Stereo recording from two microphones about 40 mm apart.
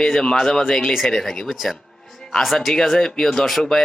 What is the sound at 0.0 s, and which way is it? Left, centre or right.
Speech, centre.